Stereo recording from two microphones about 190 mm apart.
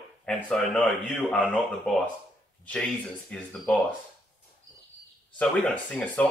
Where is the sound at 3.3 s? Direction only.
5° left (ahead or behind).